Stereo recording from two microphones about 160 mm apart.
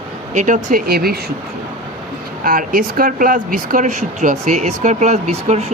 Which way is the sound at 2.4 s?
60° right (ahead or behind).